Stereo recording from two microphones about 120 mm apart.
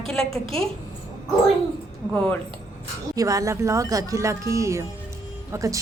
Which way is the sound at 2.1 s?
15° left (ahead or behind).